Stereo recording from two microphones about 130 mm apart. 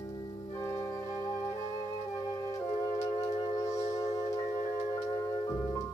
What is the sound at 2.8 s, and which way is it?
Music, 25° left (ahead or behind).